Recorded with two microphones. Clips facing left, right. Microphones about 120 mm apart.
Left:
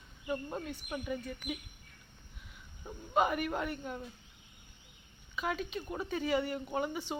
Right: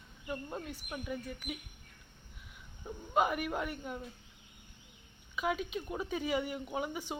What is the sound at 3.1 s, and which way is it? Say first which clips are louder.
Speech: left 1 dB; 5° right (ahead or behind).